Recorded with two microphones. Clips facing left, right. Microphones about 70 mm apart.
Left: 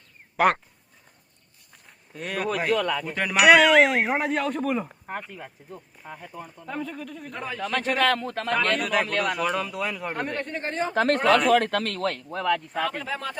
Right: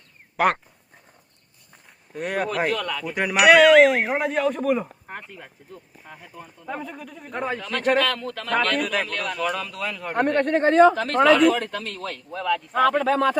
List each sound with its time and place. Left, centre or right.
0.3 s speech: centre
2.1 s speech: right
2.7 s speech: centre
3.2 s speech: centre
6.7 s speech: centre
7.3 s speech: right
7.6 s speech: left
8.8 s speech: centre
10.2 s speech: right
10.9 s speech: left
11.4 s speech: left
12.7 s speech: right